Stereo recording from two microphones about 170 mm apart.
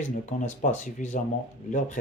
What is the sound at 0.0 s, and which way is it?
Speech, 45° left (ahead or behind).